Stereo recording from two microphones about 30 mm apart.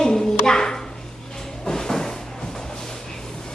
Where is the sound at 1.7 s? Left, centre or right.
Centre.